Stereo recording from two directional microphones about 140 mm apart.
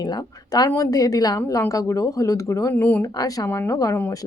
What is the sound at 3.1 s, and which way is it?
Speech, 25° left (ahead or behind).